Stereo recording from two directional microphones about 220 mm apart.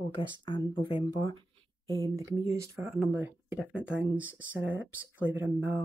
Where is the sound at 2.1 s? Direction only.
15° right (ahead or behind).